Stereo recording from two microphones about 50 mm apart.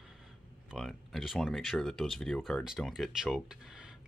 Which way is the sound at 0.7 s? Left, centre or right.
Centre.